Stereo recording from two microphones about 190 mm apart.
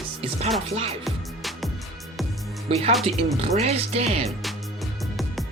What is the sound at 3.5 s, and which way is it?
Speech, 35° right (ahead or behind).